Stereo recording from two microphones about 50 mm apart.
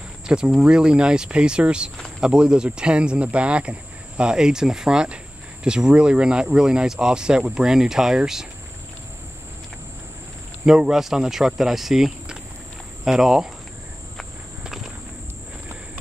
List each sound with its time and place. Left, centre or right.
0.3 s speech: centre
10.6 s speech: centre
10.9 s speech: centre